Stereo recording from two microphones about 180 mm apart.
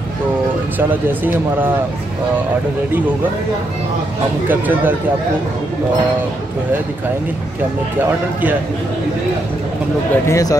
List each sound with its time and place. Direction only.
0.7 s speech: 10° right (ahead or behind)
4.5 s speech: 10° right (ahead or behind)
10.2 s speech: 15° left (ahead or behind)